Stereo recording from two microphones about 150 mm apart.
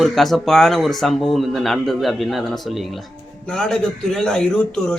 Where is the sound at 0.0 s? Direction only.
Centre (ahead or behind).